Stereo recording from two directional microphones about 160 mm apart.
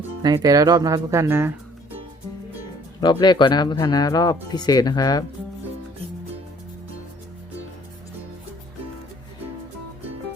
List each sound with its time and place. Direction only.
0.2 s speech: 25° right (ahead or behind)
3.0 s speech: 25° left (ahead or behind)